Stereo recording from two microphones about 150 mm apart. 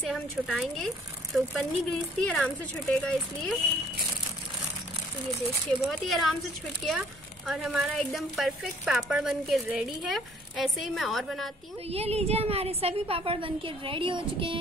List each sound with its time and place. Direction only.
0.0 s a woman's voice: centre (ahead or behind)
5.7 s a woman's voice: centre (ahead or behind)
11.9 s a woman's voice: 45° right (ahead or behind)